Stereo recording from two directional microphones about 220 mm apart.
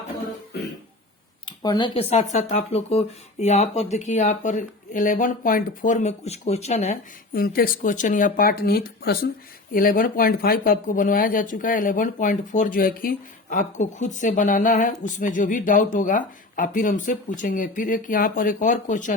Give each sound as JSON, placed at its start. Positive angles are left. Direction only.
{"t": 1.5, "sound": "speech", "side_deg": 20}
{"t": 7.3, "sound": "speech", "side_deg": 40}